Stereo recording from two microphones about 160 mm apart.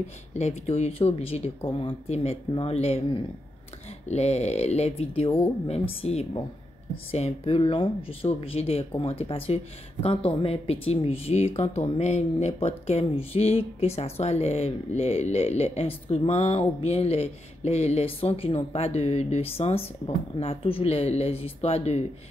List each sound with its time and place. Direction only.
0.3 s speech: 45° left (ahead or behind)